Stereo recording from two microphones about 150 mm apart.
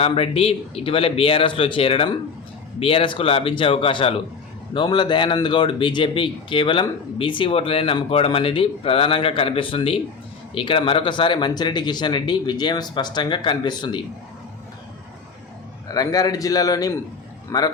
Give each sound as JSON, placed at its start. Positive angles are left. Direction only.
{"t": 0.0, "sound": "speech", "side_deg": 40}
{"t": 15.9, "sound": "a man's voice", "side_deg": 25}